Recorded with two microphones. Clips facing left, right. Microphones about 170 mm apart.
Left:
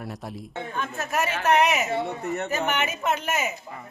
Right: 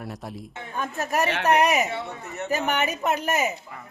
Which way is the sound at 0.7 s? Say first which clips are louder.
Right 3 dB; 35° right (ahead or behind).